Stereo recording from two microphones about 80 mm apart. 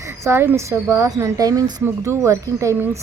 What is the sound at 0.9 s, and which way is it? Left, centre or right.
Speech, right.